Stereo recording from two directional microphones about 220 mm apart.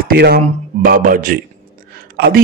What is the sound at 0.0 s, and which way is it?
Speech, 45° right (ahead or behind).